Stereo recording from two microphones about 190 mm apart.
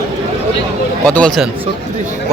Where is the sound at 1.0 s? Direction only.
5° left (ahead or behind).